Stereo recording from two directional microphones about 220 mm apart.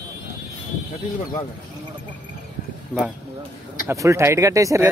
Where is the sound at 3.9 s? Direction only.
15° right (ahead or behind).